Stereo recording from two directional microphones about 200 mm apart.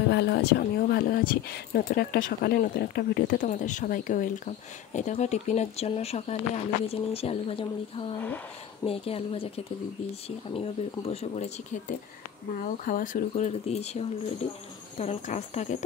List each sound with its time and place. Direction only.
0.1 s speech: 55° left (ahead or behind); by 11.8 s 35° left (ahead or behind)
12.8 s speech: 40° left (ahead or behind)